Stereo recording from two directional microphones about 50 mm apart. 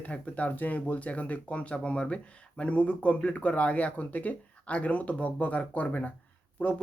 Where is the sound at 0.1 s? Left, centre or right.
Left.